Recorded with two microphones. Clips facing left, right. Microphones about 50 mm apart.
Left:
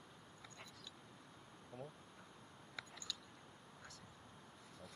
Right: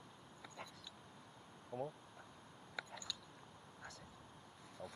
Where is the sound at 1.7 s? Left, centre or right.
Centre.